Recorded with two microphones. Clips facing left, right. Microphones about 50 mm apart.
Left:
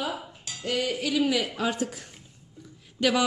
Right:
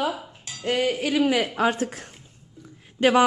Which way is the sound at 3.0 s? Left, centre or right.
Right.